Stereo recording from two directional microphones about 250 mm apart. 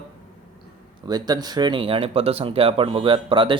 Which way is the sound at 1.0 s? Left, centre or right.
Centre.